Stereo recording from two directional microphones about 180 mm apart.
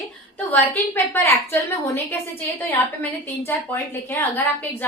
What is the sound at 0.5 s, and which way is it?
A woman's voice, 10° left (ahead or behind).